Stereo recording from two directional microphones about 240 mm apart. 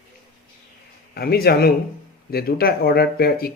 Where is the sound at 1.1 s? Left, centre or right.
Left.